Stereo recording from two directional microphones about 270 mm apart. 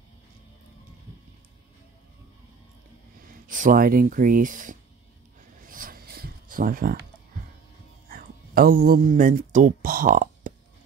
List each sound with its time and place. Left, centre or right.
3.4 s speech: right
5.7 s a sound: right
8.1 s speech: right